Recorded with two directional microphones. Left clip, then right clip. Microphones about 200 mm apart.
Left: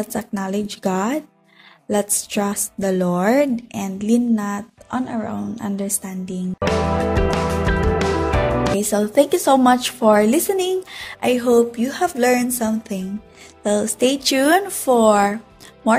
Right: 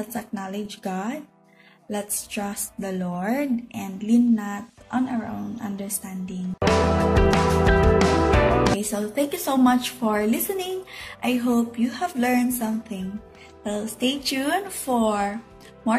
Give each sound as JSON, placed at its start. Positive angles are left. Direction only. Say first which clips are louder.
{"t": 0.1, "sound": "speech", "louder": "left 7 dB", "side_deg": 45}
{"t": 6.6, "sound": "music", "louder": "left 1 dB", "side_deg": 0}
{"t": 8.9, "sound": "speech", "louder": "left 9 dB", "side_deg": 45}